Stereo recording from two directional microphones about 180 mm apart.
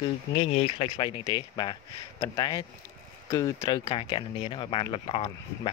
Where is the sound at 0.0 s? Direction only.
30° left (ahead or behind).